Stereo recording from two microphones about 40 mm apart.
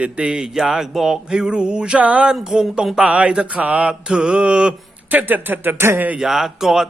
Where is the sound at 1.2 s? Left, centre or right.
Centre.